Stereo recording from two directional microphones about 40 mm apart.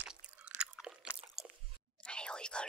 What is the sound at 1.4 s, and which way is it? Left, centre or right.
Squish, centre.